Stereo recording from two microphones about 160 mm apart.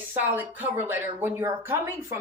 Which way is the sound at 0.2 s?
10° right (ahead or behind).